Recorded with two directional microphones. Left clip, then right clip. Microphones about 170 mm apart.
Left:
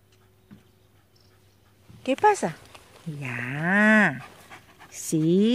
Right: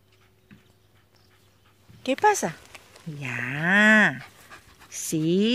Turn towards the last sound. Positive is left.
turn(degrees=10)  # may be behind; listen again after turning